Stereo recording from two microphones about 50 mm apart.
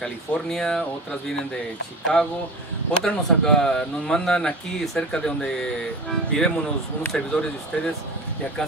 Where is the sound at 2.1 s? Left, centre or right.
Centre.